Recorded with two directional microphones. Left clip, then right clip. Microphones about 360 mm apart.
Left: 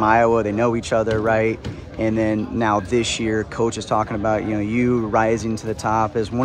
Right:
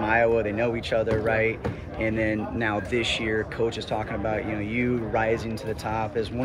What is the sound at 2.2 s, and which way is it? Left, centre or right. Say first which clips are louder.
Speech: left 6 dB; centre.